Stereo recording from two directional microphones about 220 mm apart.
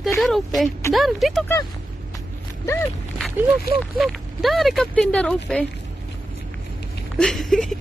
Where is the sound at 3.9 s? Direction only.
Centre (ahead or behind).